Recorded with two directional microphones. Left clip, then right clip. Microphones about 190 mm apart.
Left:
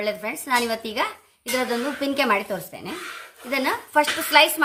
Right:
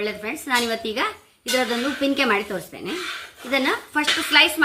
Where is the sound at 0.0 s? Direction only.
55° left (ahead or behind).